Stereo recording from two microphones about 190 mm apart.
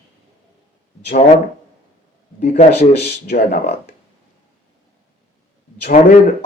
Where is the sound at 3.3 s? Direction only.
60° left (ahead or behind).